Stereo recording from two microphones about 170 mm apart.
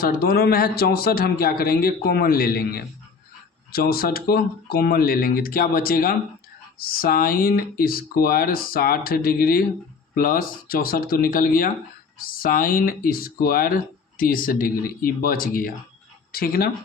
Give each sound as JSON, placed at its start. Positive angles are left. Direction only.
{"t": 0.0, "sound": "speech", "side_deg": 60}